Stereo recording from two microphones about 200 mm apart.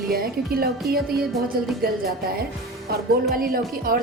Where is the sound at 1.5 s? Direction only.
50° right (ahead or behind).